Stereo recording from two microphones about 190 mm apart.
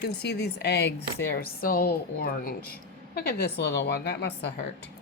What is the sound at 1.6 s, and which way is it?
A woman's voice, 50° left (ahead or behind).